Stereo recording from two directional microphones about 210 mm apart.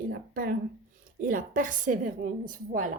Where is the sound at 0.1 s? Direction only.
45° right (ahead or behind).